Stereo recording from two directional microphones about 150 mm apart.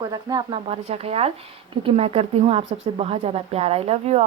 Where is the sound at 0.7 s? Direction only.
40° right (ahead or behind).